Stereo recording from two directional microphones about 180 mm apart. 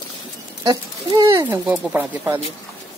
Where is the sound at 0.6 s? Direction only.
20° right (ahead or behind).